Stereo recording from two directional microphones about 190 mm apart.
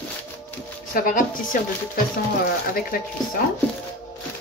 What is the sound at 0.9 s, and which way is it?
Speech, 45° left (ahead or behind).